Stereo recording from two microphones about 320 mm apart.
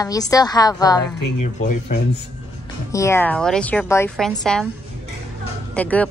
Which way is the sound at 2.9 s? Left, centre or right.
Centre.